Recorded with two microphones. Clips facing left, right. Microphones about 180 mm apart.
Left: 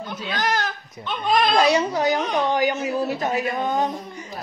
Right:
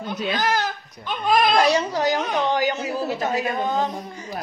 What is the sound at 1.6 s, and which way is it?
Speech, 10° left (ahead or behind).